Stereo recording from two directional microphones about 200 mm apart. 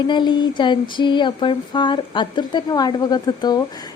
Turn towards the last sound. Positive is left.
turn(degrees=20)  # may be behind; listen again after turning